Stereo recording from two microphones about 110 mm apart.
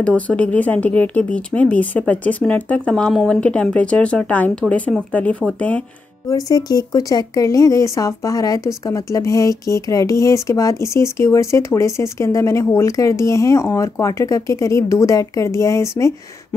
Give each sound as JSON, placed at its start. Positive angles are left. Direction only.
{"t": 0.0, "sound": "speech", "side_deg": 10}
{"t": 6.2, "sound": "speech", "side_deg": 35}